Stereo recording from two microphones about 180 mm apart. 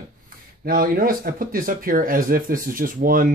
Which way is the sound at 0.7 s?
55° right (ahead or behind).